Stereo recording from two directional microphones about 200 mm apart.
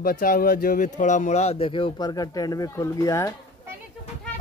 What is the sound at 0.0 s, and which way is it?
Speech, 45° left (ahead or behind).